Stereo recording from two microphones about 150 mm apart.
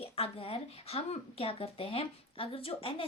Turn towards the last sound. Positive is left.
turn(degrees=35)  # may be behind; listen again after turning